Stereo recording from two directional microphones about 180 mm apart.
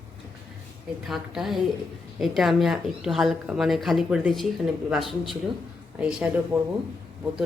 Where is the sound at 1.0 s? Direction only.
Centre (ahead or behind).